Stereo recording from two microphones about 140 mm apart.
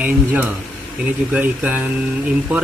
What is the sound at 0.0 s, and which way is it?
Speech, 10° right (ahead or behind).